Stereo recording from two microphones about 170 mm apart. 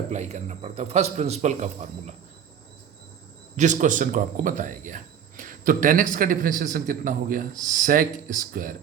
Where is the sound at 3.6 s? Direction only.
45° right (ahead or behind).